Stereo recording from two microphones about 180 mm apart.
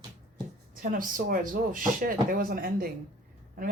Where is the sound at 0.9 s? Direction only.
50° right (ahead or behind).